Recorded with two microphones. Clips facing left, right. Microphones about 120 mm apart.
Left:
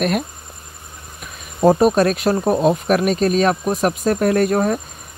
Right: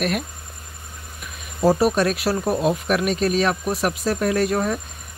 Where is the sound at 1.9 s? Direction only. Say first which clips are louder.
Left 4 dB; 50° left (ahead or behind).